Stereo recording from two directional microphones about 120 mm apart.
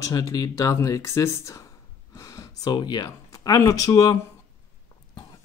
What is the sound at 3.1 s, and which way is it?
Speech, 30° left (ahead or behind).